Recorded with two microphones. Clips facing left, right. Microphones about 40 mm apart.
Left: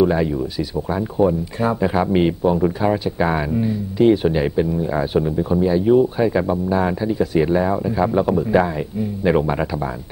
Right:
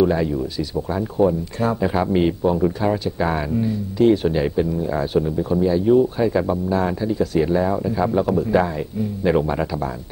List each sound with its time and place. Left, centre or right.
0.0 s speech: centre